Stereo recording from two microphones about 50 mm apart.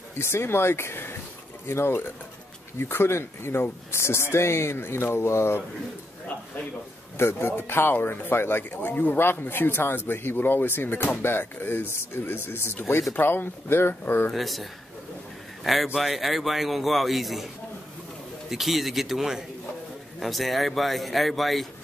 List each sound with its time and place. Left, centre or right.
0.2 s speech: left
7.2 s speech: left
14.3 s a man's voice: centre
18.5 s a man's voice: centre